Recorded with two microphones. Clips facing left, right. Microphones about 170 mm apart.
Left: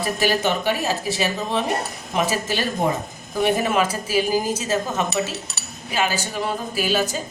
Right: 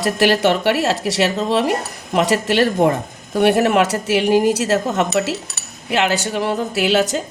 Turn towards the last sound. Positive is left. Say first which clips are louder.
# right 5 dB
turn(degrees=-75)  # may be behind; listen again after turning